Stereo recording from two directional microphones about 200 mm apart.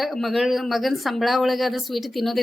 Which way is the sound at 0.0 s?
Centre (ahead or behind).